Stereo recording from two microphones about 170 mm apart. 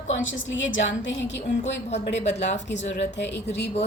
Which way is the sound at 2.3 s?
40° left (ahead or behind).